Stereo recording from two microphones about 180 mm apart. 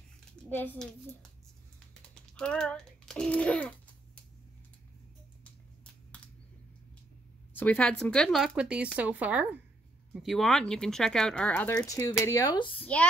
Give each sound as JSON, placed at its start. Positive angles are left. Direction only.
{"t": 0.5, "sound": "a child's voice", "side_deg": 10}
{"t": 2.3, "sound": "a child's voice", "side_deg": 5}
{"t": 7.5, "sound": "speech", "side_deg": 10}
{"t": 11.7, "sound": "speech", "side_deg": 20}